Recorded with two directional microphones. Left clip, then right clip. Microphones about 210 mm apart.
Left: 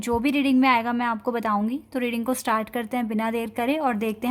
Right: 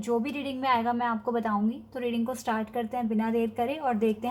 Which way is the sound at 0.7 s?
90° left.